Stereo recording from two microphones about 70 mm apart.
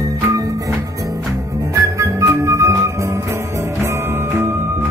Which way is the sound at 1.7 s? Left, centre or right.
Right.